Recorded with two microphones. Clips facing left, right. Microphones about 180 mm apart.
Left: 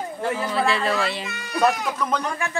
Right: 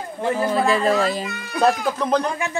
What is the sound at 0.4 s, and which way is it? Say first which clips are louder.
Speech: right 5 dB; 45° right (ahead or behind).